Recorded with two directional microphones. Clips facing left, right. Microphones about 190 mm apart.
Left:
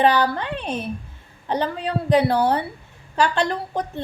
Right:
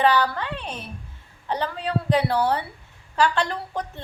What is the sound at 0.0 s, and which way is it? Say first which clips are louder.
A woman's voice: left 2 dB; 20° left (ahead or behind).